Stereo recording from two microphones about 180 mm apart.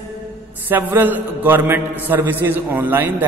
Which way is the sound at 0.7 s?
10° right (ahead or behind).